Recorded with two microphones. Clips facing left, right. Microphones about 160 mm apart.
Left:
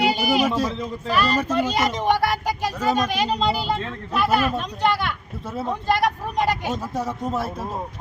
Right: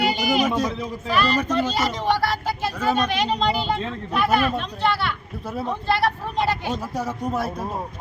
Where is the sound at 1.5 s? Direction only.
15° left (ahead or behind).